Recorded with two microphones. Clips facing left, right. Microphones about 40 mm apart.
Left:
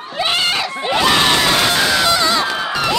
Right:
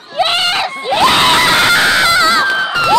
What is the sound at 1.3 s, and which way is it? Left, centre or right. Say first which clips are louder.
Goose: right 5 dB; right.